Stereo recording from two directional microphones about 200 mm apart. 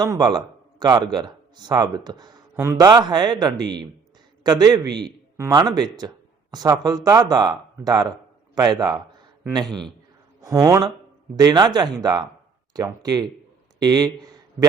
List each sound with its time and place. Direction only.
0.0 s speech: 20° right (ahead or behind)
10.4 s speech: 15° right (ahead or behind)